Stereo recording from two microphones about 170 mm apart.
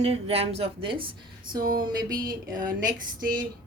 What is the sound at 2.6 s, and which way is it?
Female singing, 55° right (ahead or behind).